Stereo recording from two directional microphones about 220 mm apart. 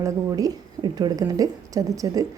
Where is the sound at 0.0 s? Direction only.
15° right (ahead or behind).